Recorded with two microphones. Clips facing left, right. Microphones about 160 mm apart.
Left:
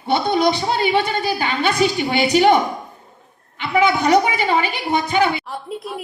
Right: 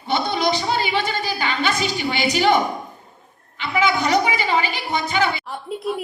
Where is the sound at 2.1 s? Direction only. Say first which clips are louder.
Left 3 dB; 50° left (ahead or behind).